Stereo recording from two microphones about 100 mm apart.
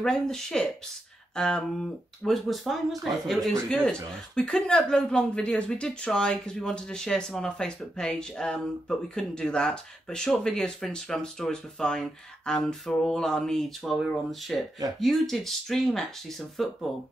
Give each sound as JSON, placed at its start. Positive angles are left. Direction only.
{"t": 0.0, "sound": "speech", "side_deg": 5}